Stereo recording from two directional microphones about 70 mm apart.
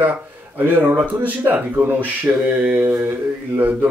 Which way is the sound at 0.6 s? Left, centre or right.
Right.